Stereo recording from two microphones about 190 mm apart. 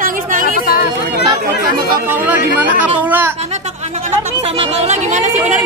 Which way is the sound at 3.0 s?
10° right (ahead or behind).